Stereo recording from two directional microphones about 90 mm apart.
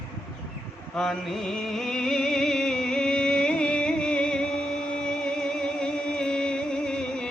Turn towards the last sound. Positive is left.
turn(degrees=10)  # may be behind; listen again after turning